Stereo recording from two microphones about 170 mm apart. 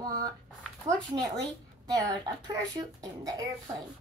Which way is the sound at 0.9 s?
45° right (ahead or behind).